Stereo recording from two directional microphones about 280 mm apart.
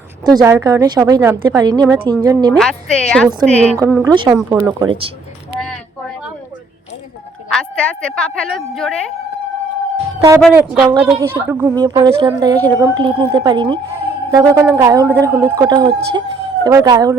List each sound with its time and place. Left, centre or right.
0.3 s a woman's voice: centre
2.5 s a woman's voice: centre
3.8 s a woman's voice: centre
7.5 s a woman's voice: centre
10.2 s a woman's voice: centre